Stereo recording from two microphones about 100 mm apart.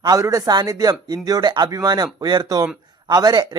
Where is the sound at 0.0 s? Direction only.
35° right (ahead or behind).